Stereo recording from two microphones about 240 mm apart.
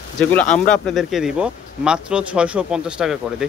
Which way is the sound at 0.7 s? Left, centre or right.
Centre.